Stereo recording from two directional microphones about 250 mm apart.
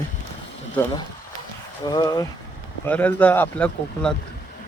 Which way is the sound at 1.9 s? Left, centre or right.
Centre.